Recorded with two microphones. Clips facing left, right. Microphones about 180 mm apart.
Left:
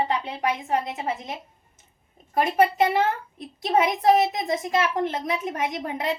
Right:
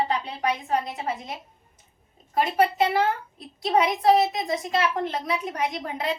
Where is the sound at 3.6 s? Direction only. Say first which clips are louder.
Even; 20° left (ahead or behind).